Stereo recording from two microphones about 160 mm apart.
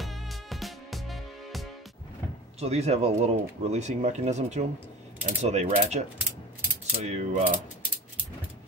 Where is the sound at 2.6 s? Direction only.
40° right (ahead or behind).